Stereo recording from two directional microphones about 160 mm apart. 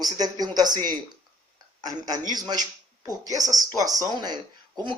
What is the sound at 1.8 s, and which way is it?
Speech, 25° right (ahead or behind).